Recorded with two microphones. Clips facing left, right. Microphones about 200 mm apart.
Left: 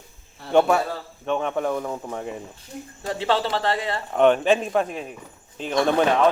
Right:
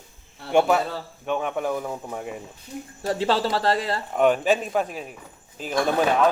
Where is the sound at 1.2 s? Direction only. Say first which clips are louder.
Left 2 dB; 5° right (ahead or behind).